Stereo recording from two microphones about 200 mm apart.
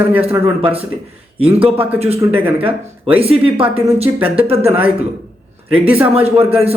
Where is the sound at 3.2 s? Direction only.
30° right (ahead or behind).